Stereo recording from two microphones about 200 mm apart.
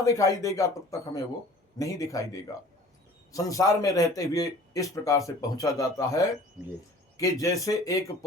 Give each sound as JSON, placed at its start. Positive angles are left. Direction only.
{"t": 0.0, "sound": "a man's voice", "side_deg": 15}